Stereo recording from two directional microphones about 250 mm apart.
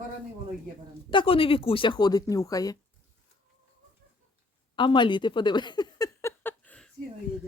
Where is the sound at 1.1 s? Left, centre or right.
Left.